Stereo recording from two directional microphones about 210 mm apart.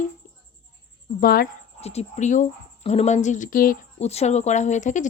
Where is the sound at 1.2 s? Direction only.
45° left (ahead or behind).